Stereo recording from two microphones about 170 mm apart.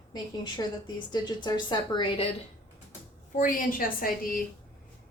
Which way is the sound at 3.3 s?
50° left (ahead or behind).